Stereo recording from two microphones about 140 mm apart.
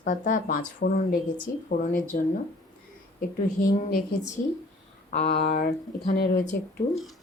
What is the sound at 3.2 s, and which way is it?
Speech, 80° left.